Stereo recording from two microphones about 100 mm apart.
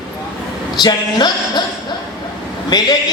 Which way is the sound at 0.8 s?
45° left (ahead or behind).